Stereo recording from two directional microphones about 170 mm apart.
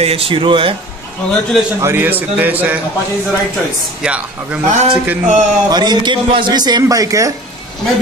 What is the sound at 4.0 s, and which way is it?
Speech, 5° right (ahead or behind).